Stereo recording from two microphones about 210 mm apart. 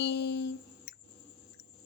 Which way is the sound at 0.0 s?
55° left (ahead or behind).